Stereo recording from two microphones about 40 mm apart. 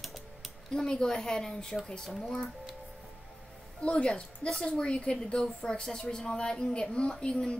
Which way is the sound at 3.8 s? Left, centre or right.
Left.